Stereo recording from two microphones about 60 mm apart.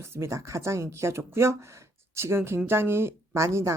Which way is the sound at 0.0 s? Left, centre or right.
Right.